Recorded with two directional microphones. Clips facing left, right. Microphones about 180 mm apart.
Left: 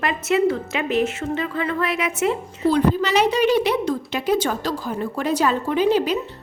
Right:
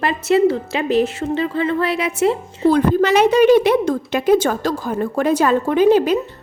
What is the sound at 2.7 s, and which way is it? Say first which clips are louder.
A woman's voice: right 4 dB; 50° right (ahead or behind).